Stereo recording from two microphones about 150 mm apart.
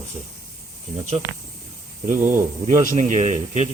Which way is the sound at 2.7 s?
55° right (ahead or behind).